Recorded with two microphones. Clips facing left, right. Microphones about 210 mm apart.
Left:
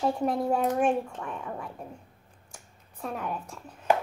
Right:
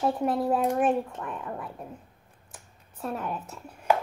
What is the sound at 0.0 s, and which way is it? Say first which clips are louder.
Speech: right 1 dB; centre (ahead or behind).